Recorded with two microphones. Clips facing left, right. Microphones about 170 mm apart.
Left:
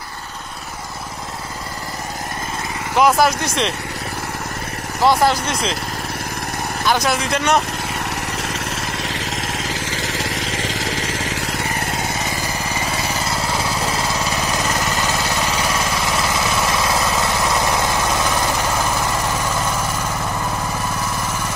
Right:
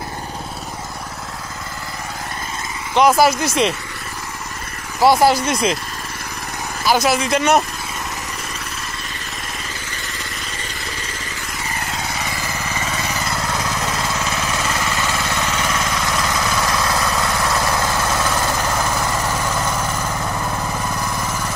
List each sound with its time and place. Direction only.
3.0 s speech: 5° right (ahead or behind)
5.0 s speech: 10° right (ahead or behind)
6.9 s speech: 5° right (ahead or behind)
8.4 s vehicle: 80° left
13.7 s lawn mower: 30° left (ahead or behind)
15.0 s vehicle: 15° left (ahead or behind)
15.6 s vehicle: 30° left (ahead or behind); by 20.1 s 10° left (ahead or behind)